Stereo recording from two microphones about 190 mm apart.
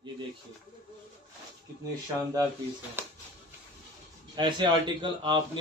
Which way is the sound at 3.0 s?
10° right (ahead or behind).